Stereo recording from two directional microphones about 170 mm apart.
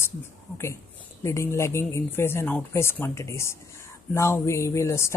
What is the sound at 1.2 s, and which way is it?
Speech, 15° left (ahead or behind).